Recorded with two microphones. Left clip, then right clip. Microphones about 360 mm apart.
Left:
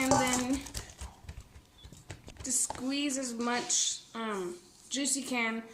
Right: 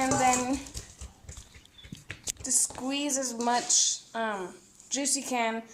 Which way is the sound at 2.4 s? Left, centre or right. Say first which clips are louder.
Right 3 dB; centre.